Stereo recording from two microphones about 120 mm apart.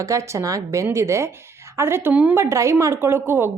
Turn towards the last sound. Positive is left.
turn(degrees=-20)  # may be behind; listen again after turning